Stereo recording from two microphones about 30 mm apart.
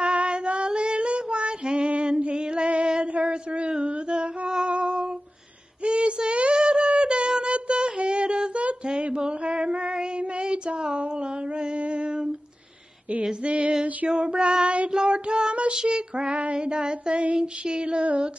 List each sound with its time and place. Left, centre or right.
0.0 s singing: right
0.7 s child singing: right
2.0 s music: right
2.9 s a sound: right
4.7 s humming: right
5.9 s child singing: right
6.6 s wind instrument: right
7.5 s a sound: right
9.0 s mantra: right
9.9 s child singing: right
11.7 s female singing: right
13.4 s female singing: right
14.0 s child singing: right
15.7 s female singing: right